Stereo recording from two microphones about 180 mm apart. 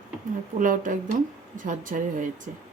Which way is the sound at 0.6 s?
45° right (ahead or behind).